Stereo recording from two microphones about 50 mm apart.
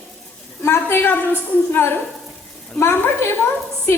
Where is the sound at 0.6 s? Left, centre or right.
Left.